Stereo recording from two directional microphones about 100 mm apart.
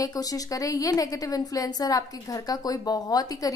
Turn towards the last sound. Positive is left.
turn(degrees=40)  # may be behind; listen again after turning